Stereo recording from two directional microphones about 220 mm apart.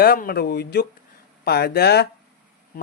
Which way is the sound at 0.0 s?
40° left (ahead or behind).